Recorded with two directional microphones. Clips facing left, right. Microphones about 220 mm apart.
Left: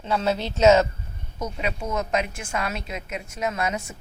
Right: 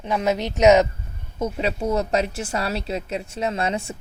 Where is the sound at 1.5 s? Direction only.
35° right (ahead or behind).